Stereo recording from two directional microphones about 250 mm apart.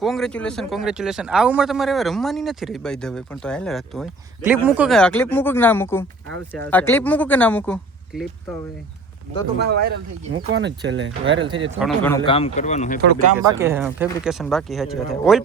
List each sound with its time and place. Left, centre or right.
0.0 s a man's voice: centre
9.6 s speech: right
11.4 s speech: centre
11.8 s a man's voice: centre
12.1 s speech: left
13.4 s a man's voice: centre